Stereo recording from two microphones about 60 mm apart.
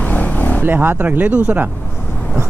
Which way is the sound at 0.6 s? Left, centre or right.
Right.